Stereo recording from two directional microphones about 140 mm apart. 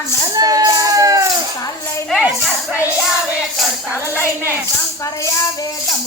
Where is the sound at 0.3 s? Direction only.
25° right (ahead or behind).